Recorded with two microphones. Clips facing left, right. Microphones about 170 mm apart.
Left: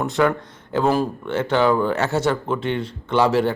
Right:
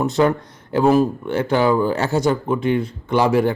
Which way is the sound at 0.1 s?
30° right (ahead or behind).